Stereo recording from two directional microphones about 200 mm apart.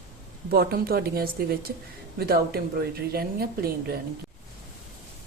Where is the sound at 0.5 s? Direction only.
50° right (ahead or behind).